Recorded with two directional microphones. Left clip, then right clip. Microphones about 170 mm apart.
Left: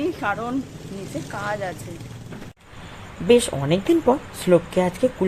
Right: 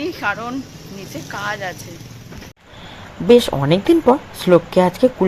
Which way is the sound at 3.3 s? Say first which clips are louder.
Right 5 dB; 20° right (ahead or behind).